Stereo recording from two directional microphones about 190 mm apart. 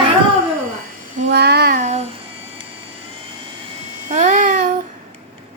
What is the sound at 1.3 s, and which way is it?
Child singing, 60° right (ahead or behind).